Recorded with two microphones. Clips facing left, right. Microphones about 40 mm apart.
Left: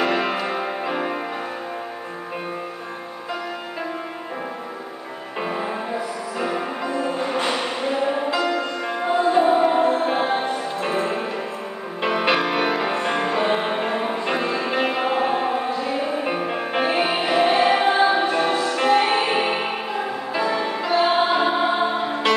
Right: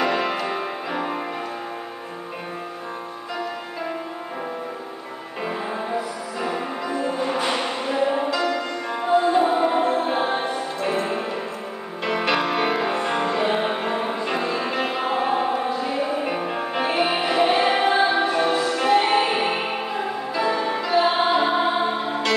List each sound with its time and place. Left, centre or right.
0.0 s music: centre
6.4 s music: centre
7.4 s music: centre
8.3 s music: centre